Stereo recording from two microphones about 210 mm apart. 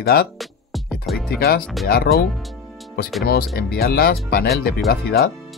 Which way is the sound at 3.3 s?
45° left (ahead or behind).